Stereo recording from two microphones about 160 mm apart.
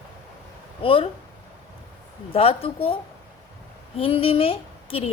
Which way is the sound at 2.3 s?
35° left (ahead or behind).